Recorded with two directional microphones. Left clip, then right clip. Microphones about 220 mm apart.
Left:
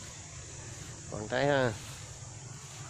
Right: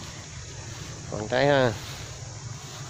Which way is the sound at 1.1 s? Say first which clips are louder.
Right 7 dB; 5° left (ahead or behind).